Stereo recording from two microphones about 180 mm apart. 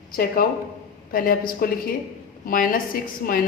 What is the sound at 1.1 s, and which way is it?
Speech, 55° left (ahead or behind).